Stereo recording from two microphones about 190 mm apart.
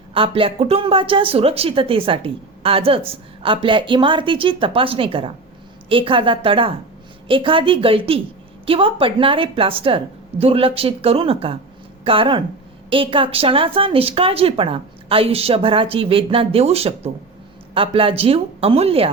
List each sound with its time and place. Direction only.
0.1 s speech: 30° right (ahead or behind)